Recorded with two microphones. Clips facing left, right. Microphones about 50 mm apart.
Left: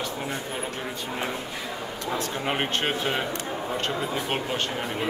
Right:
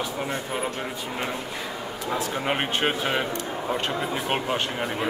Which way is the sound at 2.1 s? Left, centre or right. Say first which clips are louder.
Right 2 dB; centre.